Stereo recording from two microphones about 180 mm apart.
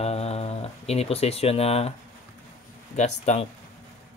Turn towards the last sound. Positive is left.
turn(degrees=40)  # may be behind; listen again after turning